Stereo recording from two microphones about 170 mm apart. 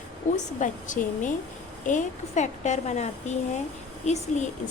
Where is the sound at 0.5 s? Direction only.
50° left (ahead or behind).